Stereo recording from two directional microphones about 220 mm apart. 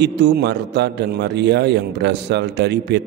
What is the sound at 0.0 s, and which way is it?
A man's voice, 50° right (ahead or behind).